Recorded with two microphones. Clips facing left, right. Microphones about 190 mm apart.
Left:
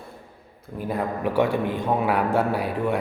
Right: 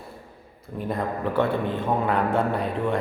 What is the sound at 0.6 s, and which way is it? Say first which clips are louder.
A man's voice: left 1 dB; 5° left (ahead or behind).